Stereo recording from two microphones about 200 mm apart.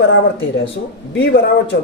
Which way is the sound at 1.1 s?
60° left (ahead or behind).